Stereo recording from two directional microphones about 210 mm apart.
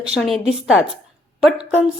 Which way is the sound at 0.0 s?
Centre (ahead or behind).